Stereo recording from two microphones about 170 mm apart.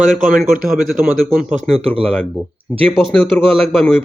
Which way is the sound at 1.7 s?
35° right (ahead or behind).